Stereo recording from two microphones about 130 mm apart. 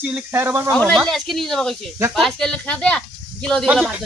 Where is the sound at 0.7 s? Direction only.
10° left (ahead or behind).